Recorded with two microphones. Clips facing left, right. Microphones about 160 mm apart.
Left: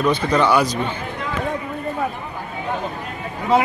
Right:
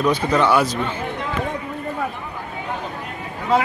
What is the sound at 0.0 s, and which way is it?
Speech, 10° right (ahead or behind).